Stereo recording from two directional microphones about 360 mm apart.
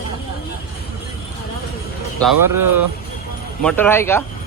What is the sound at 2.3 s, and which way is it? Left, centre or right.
Speech, right.